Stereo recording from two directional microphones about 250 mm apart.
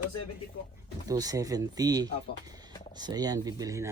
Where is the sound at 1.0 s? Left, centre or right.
Centre.